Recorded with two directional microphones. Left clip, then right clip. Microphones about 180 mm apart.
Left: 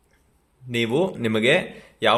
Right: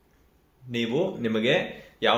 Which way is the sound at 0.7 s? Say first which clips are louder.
Left 4 dB; 60° left (ahead or behind).